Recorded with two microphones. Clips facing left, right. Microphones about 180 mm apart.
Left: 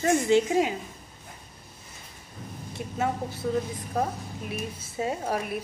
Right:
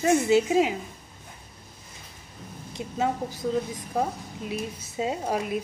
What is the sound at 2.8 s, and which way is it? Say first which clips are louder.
A woman's voice: right 2 dB; 15° right (ahead or behind).